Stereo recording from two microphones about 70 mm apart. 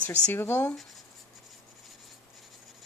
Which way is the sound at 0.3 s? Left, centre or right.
Left.